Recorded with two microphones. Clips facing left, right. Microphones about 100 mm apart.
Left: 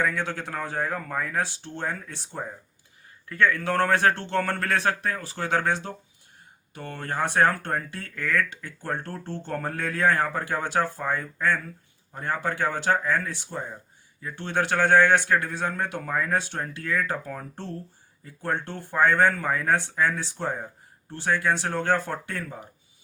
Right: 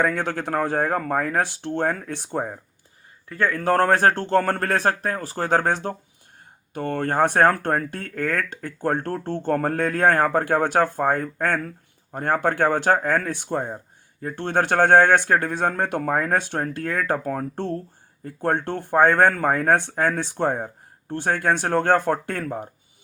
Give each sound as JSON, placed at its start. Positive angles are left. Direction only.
{"t": 0.0, "sound": "speech", "side_deg": -50}
{"t": 3.2, "sound": "speech", "side_deg": -35}